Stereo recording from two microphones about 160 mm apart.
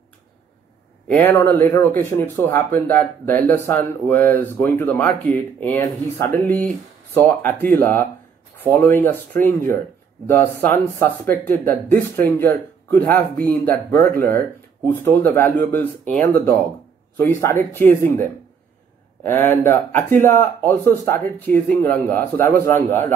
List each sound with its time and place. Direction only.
1.0 s speech: 15° left (ahead or behind)
19.2 s speech: 15° left (ahead or behind)